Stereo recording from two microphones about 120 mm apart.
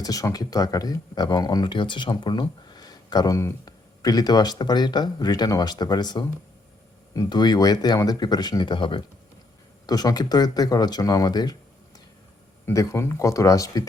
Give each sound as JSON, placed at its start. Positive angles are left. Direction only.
{"t": 0.0, "sound": "speech", "side_deg": 30}
{"t": 12.6, "sound": "speech", "side_deg": 25}